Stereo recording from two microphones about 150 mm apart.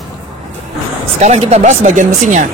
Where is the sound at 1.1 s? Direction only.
45° right (ahead or behind).